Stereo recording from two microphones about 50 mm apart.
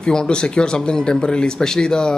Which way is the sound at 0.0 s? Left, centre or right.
Centre.